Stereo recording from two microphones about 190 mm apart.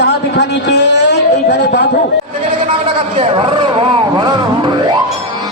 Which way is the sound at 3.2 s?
30° right (ahead or behind).